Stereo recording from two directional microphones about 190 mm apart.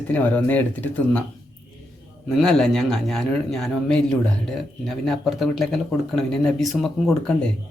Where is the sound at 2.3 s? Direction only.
Centre (ahead or behind).